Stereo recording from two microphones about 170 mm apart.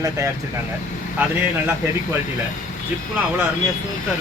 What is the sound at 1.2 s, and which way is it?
Speech, 10° right (ahead or behind).